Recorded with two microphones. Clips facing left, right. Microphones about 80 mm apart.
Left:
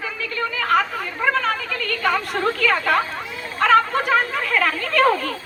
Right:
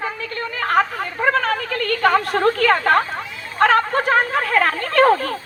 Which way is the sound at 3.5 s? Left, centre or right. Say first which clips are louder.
Right 1 dB; right.